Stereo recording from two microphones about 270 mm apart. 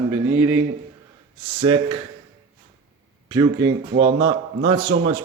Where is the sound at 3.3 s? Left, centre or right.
Centre.